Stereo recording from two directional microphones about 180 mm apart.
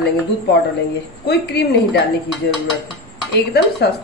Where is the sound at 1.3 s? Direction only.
65° left (ahead or behind).